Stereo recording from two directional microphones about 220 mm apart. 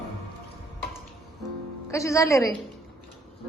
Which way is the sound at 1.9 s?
15° left (ahead or behind).